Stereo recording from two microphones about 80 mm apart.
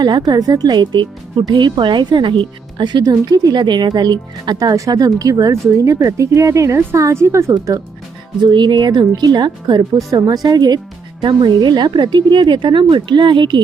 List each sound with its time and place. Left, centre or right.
0.2 s speech: right
8.4 s speech: right
10.1 s a woman's voice: right
11.2 s a woman's voice: right